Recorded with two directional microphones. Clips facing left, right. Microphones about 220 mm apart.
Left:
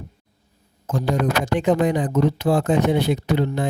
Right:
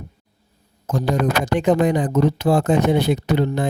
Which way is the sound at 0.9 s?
40° right (ahead or behind).